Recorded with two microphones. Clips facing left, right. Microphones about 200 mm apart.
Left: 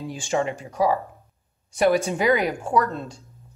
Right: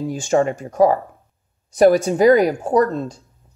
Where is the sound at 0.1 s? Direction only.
45° right (ahead or behind).